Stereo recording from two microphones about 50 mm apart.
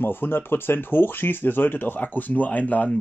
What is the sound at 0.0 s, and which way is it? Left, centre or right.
Speech, left.